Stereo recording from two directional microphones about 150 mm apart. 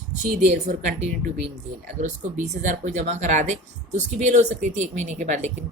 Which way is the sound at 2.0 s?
55° right (ahead or behind).